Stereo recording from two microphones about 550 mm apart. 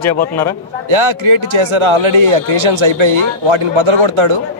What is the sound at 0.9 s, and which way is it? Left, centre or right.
A man's voice, right.